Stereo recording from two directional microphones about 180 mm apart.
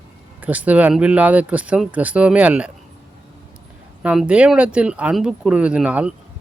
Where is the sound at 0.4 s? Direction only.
10° right (ahead or behind).